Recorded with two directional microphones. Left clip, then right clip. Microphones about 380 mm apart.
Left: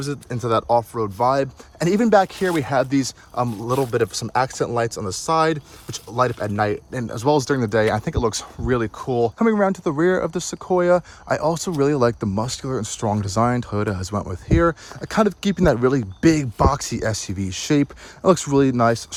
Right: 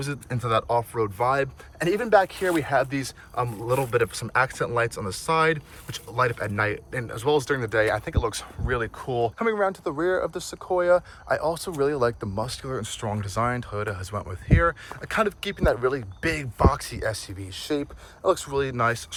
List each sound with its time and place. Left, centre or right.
0.0 s speech: centre